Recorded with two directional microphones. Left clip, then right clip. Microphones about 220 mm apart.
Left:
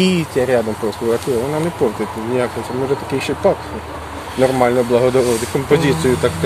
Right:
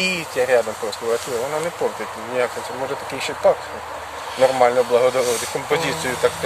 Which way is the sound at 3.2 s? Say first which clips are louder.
Even; 5° left (ahead or behind).